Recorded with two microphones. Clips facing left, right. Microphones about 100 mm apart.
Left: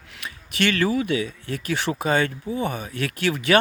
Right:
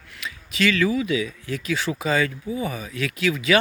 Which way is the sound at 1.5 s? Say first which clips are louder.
Even; 45° left (ahead or behind).